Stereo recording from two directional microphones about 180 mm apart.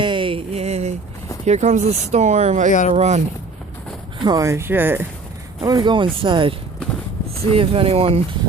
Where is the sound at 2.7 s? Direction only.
45° left (ahead or behind).